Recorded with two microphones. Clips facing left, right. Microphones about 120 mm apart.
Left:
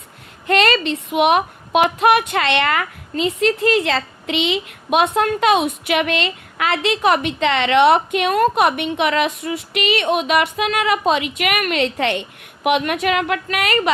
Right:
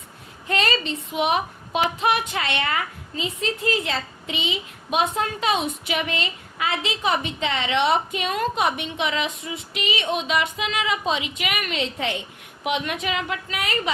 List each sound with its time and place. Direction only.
0.4 s speech: 75° left (ahead or behind)